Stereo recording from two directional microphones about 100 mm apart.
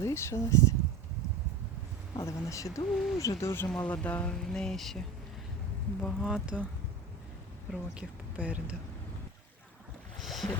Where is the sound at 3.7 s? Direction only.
15° left (ahead or behind); by 6.6 s 5° right (ahead or behind).